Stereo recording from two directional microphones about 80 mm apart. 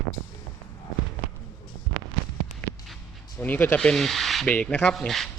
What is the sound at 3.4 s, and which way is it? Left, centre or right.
Speech, left.